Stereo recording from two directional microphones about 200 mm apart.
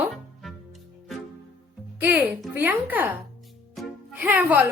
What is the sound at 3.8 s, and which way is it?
Music, 5° right (ahead or behind).